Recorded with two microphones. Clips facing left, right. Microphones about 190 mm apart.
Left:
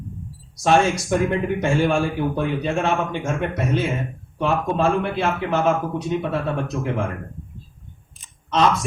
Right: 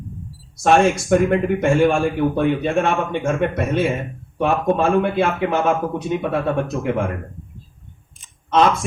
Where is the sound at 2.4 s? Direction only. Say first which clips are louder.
Right 5 dB; 55° right (ahead or behind).